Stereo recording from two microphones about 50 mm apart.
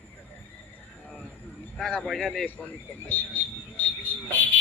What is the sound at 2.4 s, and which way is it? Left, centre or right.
Speech, left.